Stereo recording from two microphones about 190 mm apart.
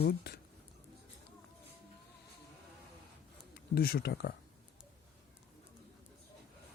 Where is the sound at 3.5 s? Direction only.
55° left (ahead or behind).